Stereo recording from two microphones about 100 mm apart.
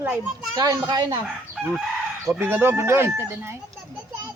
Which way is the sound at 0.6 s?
40° right (ahead or behind).